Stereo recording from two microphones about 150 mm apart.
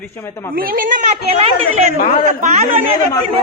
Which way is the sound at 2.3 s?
50° right (ahead or behind).